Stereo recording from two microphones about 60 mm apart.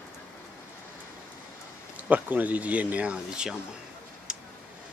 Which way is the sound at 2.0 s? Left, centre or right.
Right.